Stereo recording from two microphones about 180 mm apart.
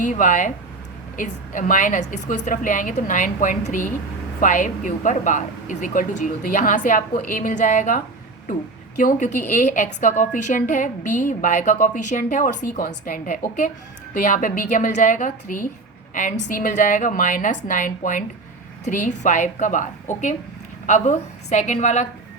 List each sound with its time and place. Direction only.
0.0 s a woman's voice: 45° left (ahead or behind)